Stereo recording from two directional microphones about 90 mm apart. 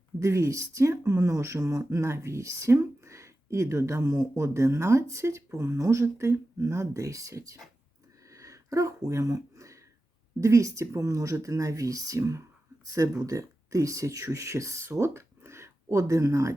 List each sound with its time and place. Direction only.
0.2 s speech: 35° right (ahead or behind)
8.3 s a sound: 40° right (ahead or behind)
10.4 s speech: 35° right (ahead or behind)